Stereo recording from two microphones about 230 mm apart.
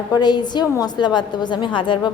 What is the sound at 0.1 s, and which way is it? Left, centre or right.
A woman's voice, centre.